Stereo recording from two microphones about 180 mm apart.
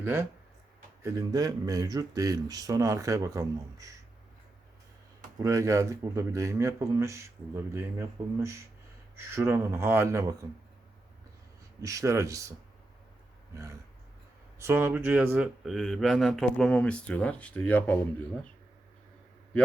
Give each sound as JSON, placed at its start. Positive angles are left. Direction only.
{"t": 0.0, "sound": "speech", "side_deg": -15}
{"t": 5.4, "sound": "speech", "side_deg": -15}
{"t": 11.8, "sound": "speech", "side_deg": -15}